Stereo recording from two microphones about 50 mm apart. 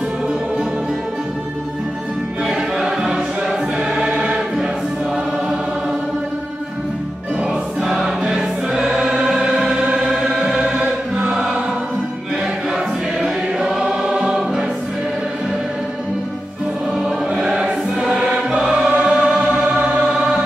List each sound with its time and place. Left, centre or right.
2.4 s music: centre
3.9 s choir: centre
7.8 s choir: centre
9.9 s music: centre
11.1 s chant: centre
13.2 s choir: centre
17.3 s choir: centre